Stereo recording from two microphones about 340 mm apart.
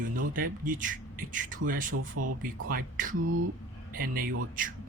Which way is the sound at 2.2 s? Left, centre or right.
Right.